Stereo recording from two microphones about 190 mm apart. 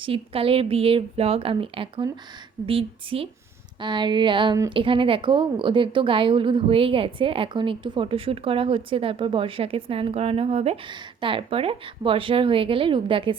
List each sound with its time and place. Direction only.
0.0 s speech: 30° right (ahead or behind)